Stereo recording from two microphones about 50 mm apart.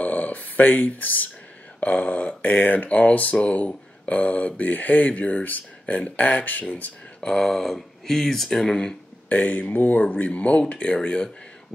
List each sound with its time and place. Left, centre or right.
0.0 s a sound: left
1.8 s speech: left
7.2 s speech: centre
9.3 s speech: left